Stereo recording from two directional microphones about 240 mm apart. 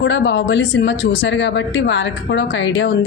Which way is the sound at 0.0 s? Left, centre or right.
Left.